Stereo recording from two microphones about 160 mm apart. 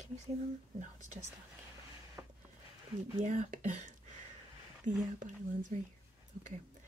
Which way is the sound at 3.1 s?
50° right (ahead or behind).